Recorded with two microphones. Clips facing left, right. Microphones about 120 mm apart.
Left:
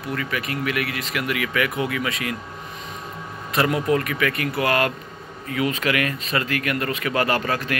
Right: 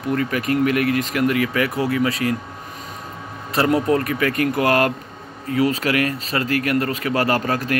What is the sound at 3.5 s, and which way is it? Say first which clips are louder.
Speech: right 3 dB; 35° right (ahead or behind).